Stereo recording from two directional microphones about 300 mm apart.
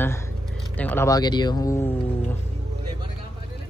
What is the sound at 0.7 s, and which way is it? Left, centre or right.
Speech, centre.